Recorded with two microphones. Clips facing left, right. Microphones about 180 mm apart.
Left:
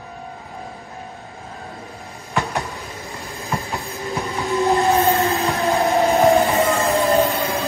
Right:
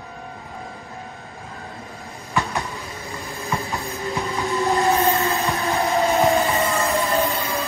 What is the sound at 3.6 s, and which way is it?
Train, centre (ahead or behind).